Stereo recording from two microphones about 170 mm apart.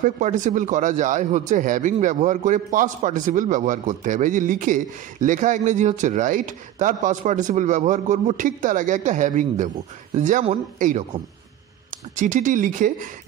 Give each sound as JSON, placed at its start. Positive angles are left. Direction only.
{"t": 0.0, "sound": "a man's voice", "side_deg": -50}